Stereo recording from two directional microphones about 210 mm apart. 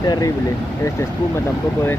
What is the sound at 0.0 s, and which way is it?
Speech, 20° left (ahead or behind).